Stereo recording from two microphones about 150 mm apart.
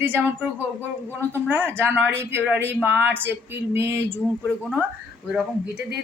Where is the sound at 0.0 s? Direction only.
15° right (ahead or behind).